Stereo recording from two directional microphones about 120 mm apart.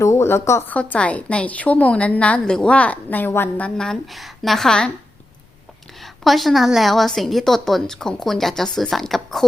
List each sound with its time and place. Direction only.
0.0 s a woman's voice: 20° left (ahead or behind)
0.8 s a woman's voice: 10° left (ahead or behind)
3.8 s a woman's voice: centre (ahead or behind)
6.0 s a woman's voice: centre (ahead or behind)